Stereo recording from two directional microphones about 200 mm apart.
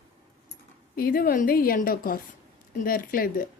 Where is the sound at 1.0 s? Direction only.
50° left (ahead or behind).